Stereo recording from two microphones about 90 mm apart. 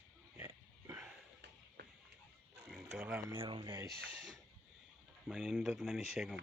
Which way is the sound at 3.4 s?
65° right (ahead or behind).